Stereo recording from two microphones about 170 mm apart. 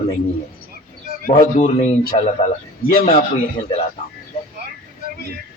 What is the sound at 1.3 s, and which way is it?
A man's voice, 45° left (ahead or behind).